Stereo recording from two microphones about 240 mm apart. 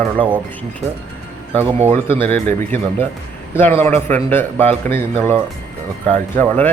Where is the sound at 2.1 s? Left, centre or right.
Centre.